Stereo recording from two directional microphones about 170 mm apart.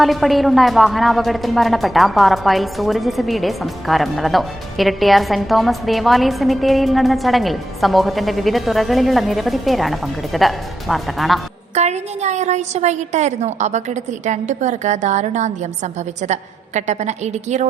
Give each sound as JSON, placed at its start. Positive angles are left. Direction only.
{"t": 0.0, "sound": "a woman's voice", "side_deg": 0}
{"t": 11.7, "sound": "a woman's voice", "side_deg": -40}